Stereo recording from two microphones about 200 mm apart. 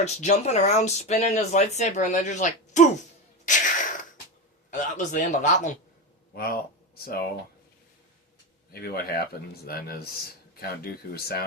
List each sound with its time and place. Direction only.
0.0 s speech: 35° left (ahead or behind)
3.4 s a sound: 40° left (ahead or behind)
4.7 s speech: 40° left (ahead or behind)
6.3 s speech: 50° left (ahead or behind)
8.7 s speech: 50° left (ahead or behind)